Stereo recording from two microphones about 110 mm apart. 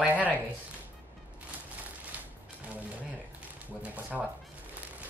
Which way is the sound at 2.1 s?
15° right (ahead or behind).